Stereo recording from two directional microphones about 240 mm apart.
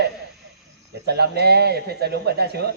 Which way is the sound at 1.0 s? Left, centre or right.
Right.